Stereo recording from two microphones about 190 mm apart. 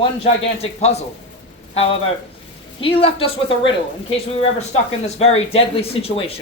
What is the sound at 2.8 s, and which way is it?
Speech, 30° left (ahead or behind).